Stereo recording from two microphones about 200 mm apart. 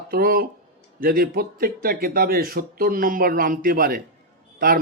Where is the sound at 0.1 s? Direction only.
50° right (ahead or behind).